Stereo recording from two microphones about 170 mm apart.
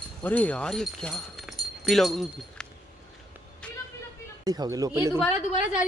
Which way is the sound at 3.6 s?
5° left (ahead or behind).